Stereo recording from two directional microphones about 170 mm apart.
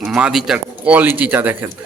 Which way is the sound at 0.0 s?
Centre (ahead or behind).